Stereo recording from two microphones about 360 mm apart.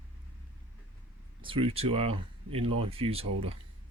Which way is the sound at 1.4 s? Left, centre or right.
Centre.